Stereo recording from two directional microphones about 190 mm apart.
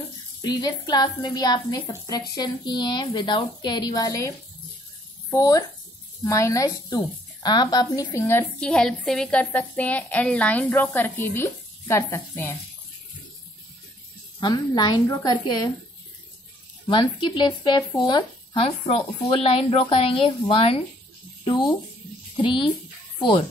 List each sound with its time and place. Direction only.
0.4 s a woman's voice: 20° left (ahead or behind)
5.3 s a woman's voice: 20° left (ahead or behind)
14.4 s a woman's voice: 20° left (ahead or behind)
16.8 s a woman's voice: 25° left (ahead or behind)